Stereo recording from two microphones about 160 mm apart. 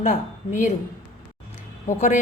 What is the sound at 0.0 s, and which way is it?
Speech, 50° left (ahead or behind).